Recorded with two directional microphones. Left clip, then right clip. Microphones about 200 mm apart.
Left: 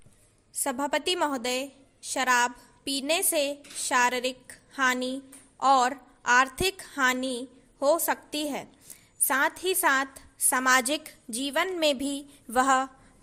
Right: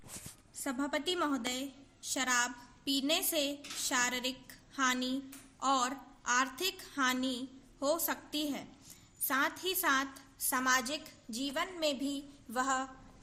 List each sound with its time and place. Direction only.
0.6 s a woman's voice: 40° left (ahead or behind)